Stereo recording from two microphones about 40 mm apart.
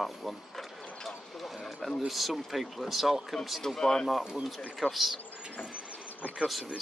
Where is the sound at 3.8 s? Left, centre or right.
Centre.